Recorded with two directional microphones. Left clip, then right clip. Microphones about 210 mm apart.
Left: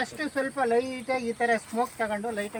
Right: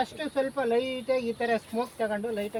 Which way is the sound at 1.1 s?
35° right (ahead or behind).